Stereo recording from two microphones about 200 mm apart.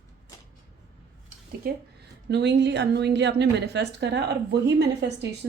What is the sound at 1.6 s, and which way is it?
A woman's voice, 50° right (ahead or behind).